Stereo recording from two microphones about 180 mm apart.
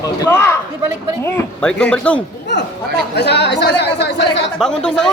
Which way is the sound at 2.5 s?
75° left (ahead or behind).